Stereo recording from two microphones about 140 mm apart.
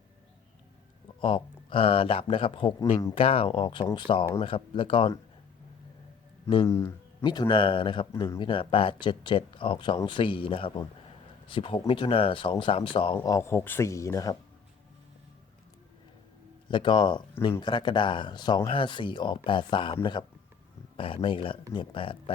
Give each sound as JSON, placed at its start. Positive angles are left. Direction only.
{"t": 1.2, "sound": "speech", "side_deg": 40}
{"t": 6.7, "sound": "speech", "side_deg": 20}
{"t": 7.3, "sound": "speech", "side_deg": 35}
{"t": 13.1, "sound": "speech", "side_deg": 20}
{"t": 16.6, "sound": "speech", "side_deg": 35}